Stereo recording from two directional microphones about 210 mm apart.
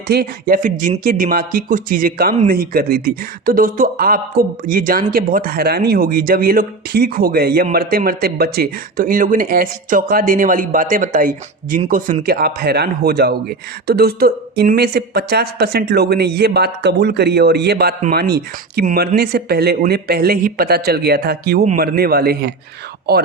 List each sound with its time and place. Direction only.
0.1 s speech: 45° right (ahead or behind)